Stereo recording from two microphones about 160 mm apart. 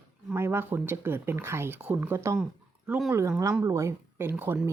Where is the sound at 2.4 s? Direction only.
5° right (ahead or behind).